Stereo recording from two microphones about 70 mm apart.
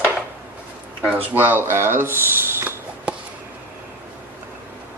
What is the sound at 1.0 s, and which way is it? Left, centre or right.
Speech, right.